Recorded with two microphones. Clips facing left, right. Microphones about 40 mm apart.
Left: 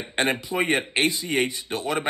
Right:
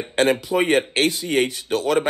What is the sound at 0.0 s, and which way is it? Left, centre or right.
Speech, left.